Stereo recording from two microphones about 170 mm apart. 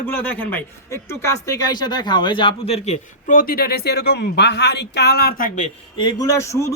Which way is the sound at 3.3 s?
60° left (ahead or behind).